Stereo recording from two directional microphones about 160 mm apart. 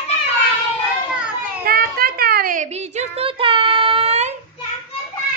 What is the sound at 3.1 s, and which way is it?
Child singing, 35° right (ahead or behind).